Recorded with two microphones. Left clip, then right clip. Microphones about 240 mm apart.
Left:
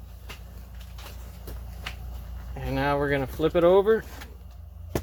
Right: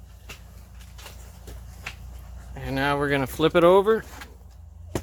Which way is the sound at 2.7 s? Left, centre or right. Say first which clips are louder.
Right 1 dB; centre.